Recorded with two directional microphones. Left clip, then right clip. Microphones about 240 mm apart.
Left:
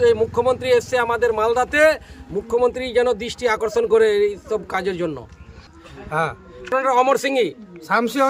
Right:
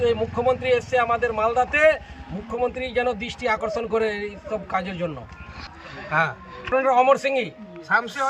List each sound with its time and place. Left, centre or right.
0.0 s a man's voice: centre
6.1 s speech: left
6.7 s a man's voice: centre
7.9 s speech: left